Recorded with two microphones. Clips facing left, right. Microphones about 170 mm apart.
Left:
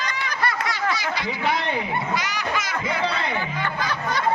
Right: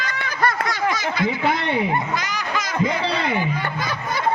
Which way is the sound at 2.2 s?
45° right (ahead or behind).